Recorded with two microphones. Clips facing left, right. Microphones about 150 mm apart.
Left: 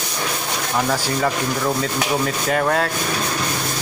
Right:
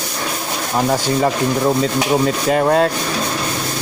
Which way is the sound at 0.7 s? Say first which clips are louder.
Right 5 dB; 25° right (ahead or behind).